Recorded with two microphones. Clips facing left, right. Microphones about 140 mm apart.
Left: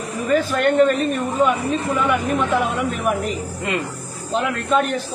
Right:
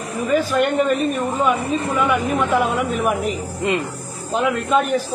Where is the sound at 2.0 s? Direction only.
Centre (ahead or behind).